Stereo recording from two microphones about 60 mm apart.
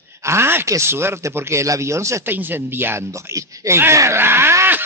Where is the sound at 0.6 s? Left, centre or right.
Right.